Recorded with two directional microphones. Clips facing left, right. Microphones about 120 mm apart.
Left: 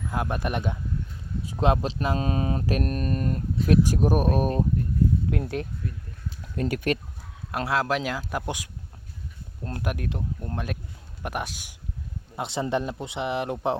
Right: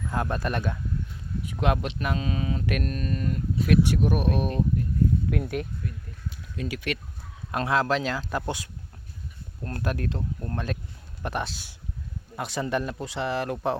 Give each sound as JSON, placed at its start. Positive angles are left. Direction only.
{"t": 0.1, "sound": "speech", "side_deg": 10}
{"t": 1.4, "sound": "speech", "side_deg": 30}
{"t": 2.1, "sound": "speech", "side_deg": 40}
{"t": 6.4, "sound": "speech", "side_deg": 50}
{"t": 7.5, "sound": "speech", "side_deg": 5}
{"t": 12.4, "sound": "speech", "side_deg": 25}